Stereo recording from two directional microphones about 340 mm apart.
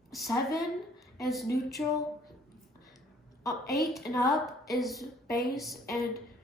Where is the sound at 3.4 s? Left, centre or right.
Centre.